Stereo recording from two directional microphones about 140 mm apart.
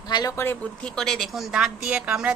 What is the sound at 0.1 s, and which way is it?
Speech, 25° left (ahead or behind).